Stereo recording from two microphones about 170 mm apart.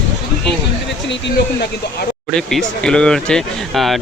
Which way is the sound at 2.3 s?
5° left (ahead or behind).